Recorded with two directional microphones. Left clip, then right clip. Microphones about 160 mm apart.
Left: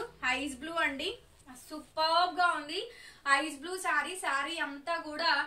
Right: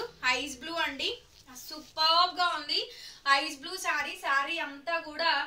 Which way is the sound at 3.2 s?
15° left (ahead or behind).